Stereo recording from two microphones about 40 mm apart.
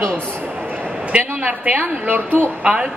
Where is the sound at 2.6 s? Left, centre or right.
Right.